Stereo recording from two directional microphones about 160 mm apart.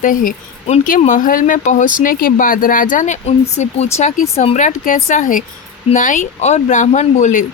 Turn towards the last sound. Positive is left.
turn(degrees=50)  # may be behind; listen again after turning